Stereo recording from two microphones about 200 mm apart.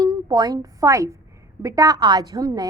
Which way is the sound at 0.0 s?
20° right (ahead or behind).